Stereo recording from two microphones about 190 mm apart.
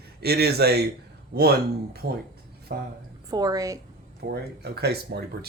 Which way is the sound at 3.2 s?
20° right (ahead or behind).